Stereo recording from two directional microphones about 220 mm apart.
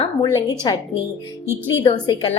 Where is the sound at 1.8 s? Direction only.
20° left (ahead or behind).